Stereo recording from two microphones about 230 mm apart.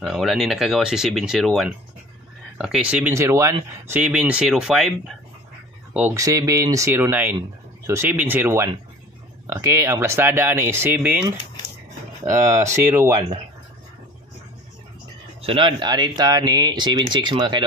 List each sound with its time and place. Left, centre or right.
0.0 s speech: centre
5.9 s speech: centre
15.4 s speech: right